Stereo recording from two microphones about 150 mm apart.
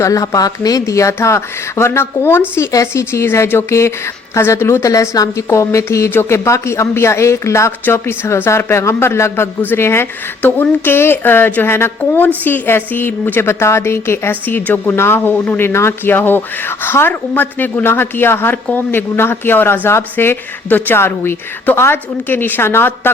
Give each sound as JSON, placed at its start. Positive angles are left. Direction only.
{"t": 0.0, "sound": "a woman's voice", "side_deg": 20}